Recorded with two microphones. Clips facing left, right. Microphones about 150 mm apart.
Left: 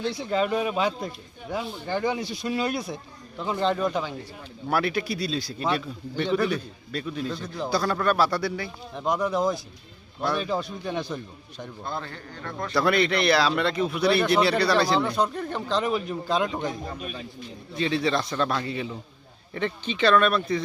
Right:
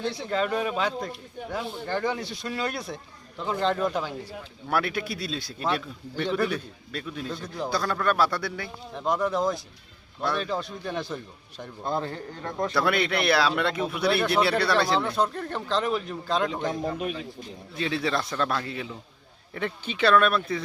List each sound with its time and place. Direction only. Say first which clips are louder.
0.1 s speech: left 4 dB; 5° left (ahead or behind)
11.8 s a man's voice: right 5 dB; 20° right (ahead or behind)
12.0 s a man's voice: right 4 dB; 30° right (ahead or behind)
12.7 s speech: left 4 dB; 5° right (ahead or behind)
17.7 s speech: left 3 dB; 5° right (ahead or behind)